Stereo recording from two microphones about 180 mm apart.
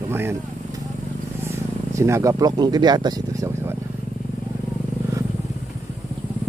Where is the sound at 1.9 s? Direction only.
15° right (ahead or behind).